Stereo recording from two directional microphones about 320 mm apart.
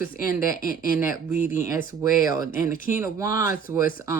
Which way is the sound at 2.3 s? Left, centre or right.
Centre.